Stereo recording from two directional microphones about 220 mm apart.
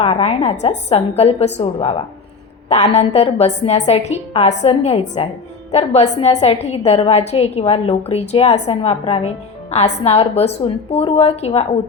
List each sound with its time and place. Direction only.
0.0 s a woman's voice: 25° left (ahead or behind)